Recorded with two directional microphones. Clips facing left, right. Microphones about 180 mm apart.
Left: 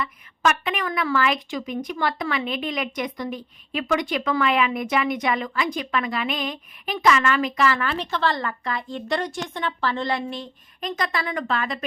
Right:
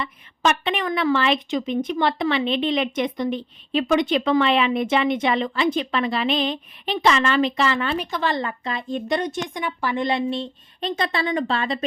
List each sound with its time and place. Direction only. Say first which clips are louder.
0.0 s a woman's voice: right 1 dB; 25° right (ahead or behind)